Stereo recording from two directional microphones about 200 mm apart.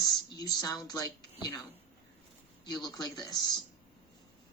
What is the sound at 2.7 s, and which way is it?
Speech, 20° left (ahead or behind).